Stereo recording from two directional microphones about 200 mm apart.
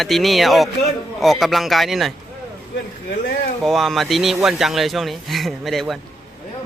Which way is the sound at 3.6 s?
Centre (ahead or behind).